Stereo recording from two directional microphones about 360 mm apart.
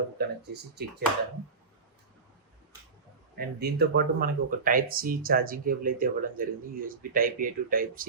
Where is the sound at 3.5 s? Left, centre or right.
Right.